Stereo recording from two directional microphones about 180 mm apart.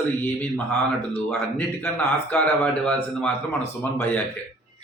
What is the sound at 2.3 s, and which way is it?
A man's voice, 10° left (ahead or behind).